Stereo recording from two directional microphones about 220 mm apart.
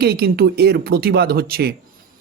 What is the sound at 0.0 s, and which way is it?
A woman's voice, 45° right (ahead or behind).